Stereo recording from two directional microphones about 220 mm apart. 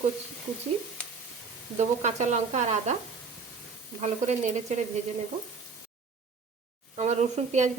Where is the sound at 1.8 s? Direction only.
30° right (ahead or behind).